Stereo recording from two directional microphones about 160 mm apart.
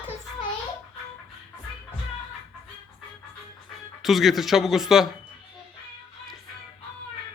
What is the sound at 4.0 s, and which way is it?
Speech, centre (ahead or behind).